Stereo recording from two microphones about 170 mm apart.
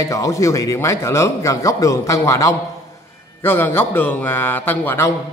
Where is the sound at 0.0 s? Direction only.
20° left (ahead or behind).